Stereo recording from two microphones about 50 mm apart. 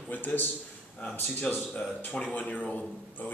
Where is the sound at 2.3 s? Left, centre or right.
Left.